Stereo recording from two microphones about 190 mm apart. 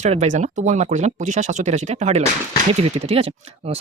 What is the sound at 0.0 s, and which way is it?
Speech, 35° right (ahead or behind).